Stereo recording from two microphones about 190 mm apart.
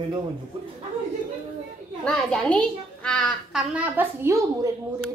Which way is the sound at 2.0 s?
Centre (ahead or behind).